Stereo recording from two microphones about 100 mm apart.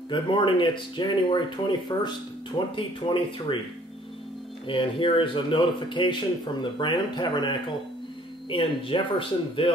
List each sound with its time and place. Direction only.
0.1 s speech: 50° left (ahead or behind)
4.6 s speech: 60° left (ahead or behind)